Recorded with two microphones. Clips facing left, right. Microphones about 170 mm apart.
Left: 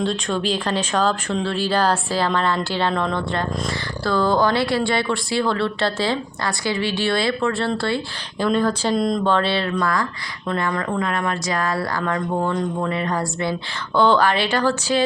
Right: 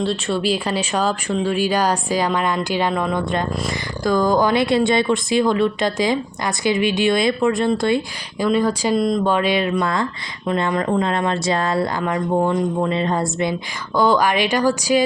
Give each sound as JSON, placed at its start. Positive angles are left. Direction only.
{"t": 0.0, "sound": "speech", "side_deg": -5}